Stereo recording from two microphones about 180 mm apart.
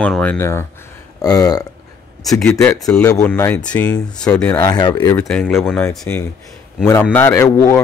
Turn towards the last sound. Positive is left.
turn(degrees=15)  # may be behind; listen again after turning